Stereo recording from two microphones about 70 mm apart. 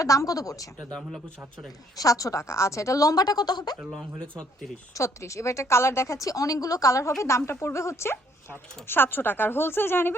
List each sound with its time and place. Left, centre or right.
0.0 s a woman's voice: left
2.0 s a woman's voice: left
4.2 s speech: centre
4.9 s a woman's voice: left